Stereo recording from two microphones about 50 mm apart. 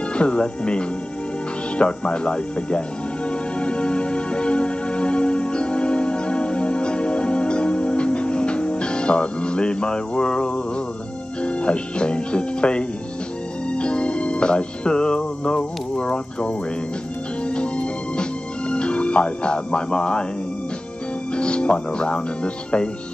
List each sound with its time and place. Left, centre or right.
0.1 s speech: left
3.3 s music: left
11.4 s speech: left
13.7 s music: left
17.5 s organ: left
18.7 s speech: left
21.4 s speech: left